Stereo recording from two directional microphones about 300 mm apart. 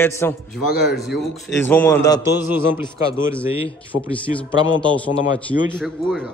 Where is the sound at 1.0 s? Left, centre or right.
Centre.